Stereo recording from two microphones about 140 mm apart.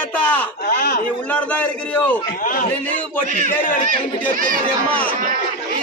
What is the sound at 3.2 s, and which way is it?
Speech, 65° right (ahead or behind).